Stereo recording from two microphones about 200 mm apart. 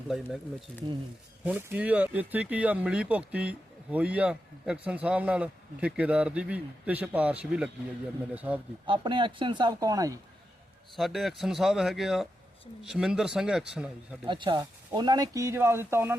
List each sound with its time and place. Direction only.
0.7 s speech: 5° left (ahead or behind)
1.5 s speech: 5° right (ahead or behind)
8.9 s speech: 25° right (ahead or behind)
10.9 s speech: centre (ahead or behind)
14.3 s speech: 25° right (ahead or behind)